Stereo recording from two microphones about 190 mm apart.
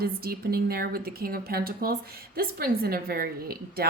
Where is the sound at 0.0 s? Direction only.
55° right (ahead or behind).